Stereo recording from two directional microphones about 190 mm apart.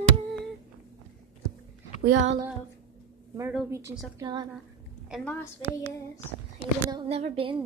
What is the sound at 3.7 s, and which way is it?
Speech, 15° right (ahead or behind).